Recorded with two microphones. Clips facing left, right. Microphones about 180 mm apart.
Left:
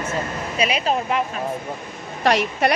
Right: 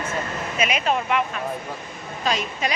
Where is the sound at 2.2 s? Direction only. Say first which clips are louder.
Left 7 dB; 70° left (ahead or behind).